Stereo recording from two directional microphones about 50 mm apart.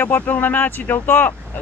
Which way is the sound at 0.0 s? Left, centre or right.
Left.